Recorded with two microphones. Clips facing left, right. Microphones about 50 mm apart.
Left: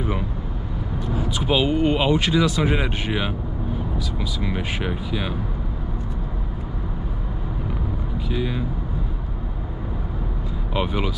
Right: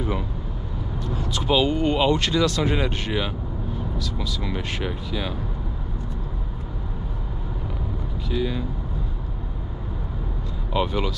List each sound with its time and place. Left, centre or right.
1.0 s speech: centre
8.3 s speech: centre
10.7 s speech: centre